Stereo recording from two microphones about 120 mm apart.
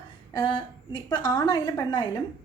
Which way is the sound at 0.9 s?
35° left (ahead or behind).